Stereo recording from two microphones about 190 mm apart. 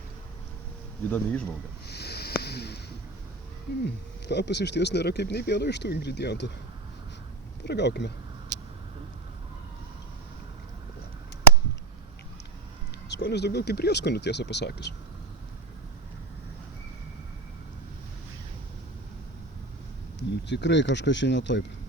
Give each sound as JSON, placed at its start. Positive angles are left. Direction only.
{"t": 1.1, "sound": "speech", "side_deg": 5}
{"t": 1.9, "sound": "a sound", "side_deg": 60}
{"t": 3.8, "sound": "speech", "side_deg": 65}
{"t": 7.6, "sound": "speech", "side_deg": 65}
{"t": 13.1, "sound": "speech", "side_deg": 60}
{"t": 20.1, "sound": "speech", "side_deg": 65}